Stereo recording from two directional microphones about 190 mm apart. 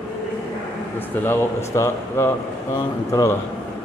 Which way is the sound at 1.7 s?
15° left (ahead or behind).